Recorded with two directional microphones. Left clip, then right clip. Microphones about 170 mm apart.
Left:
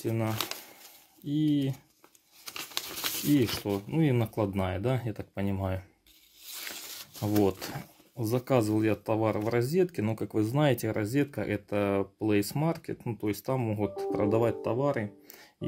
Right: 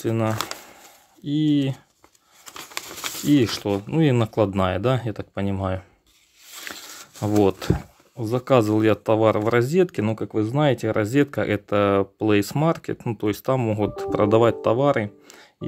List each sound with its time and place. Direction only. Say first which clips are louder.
0.0 s speech: right 8 dB; 35° right (ahead or behind)
2.5 s a sound: right 3 dB; 25° right (ahead or behind)
3.3 s speech: right 9 dB; 40° right (ahead or behind)
6.7 s a sound: right 5 dB; 30° right (ahead or behind)
8.2 s speech: right 8 dB; 20° right (ahead or behind)
8.5 s speech: right 10 dB; 35° right (ahead or behind)
10.1 s speech: right 6 dB; 20° right (ahead or behind)
11.0 s speech: right 9 dB; 35° right (ahead or behind); by 15.0 s 55° right (ahead or behind)